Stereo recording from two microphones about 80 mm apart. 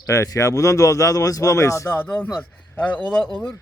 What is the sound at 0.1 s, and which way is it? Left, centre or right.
Speech, left.